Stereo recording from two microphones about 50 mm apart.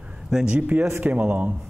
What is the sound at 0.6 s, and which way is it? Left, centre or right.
Speech, right.